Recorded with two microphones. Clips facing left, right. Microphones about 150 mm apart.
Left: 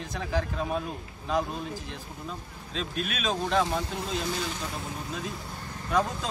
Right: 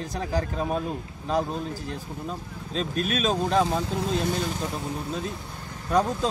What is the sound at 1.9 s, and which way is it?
A man's voice, 40° right (ahead or behind).